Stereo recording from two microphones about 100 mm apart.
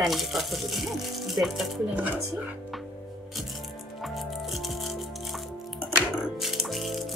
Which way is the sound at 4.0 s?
Centre (ahead or behind).